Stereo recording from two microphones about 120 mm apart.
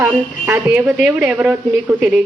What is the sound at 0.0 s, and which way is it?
Speech, 15° right (ahead or behind).